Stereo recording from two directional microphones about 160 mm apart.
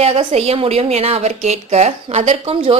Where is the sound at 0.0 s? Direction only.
40° right (ahead or behind).